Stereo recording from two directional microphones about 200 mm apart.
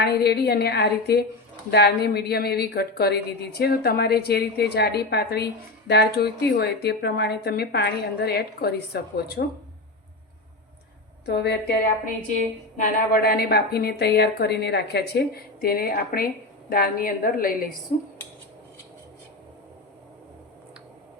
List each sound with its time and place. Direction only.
0.0 s a woman's voice: 55° left (ahead or behind)
11.3 s a woman's voice: 55° left (ahead or behind)
12.7 s a woman's voice: 50° left (ahead or behind)